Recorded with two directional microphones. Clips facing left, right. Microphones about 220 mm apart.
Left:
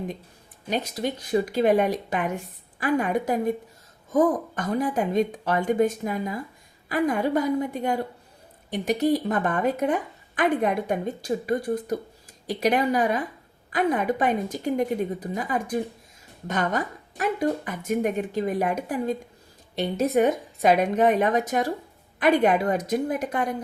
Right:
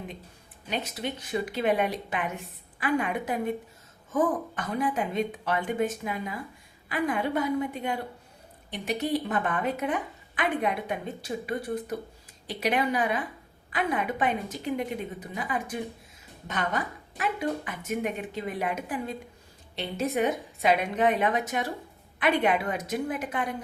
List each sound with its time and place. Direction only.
0.7 s a woman's voice: 40° left (ahead or behind)